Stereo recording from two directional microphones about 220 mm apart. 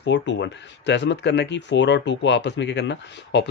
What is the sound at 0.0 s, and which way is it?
Speech, 50° left (ahead or behind).